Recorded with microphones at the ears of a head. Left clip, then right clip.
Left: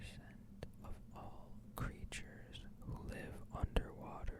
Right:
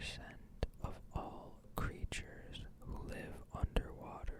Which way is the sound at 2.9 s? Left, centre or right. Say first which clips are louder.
Right 2 dB; centre.